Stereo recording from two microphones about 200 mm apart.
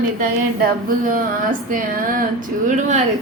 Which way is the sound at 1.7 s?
45° right (ahead or behind).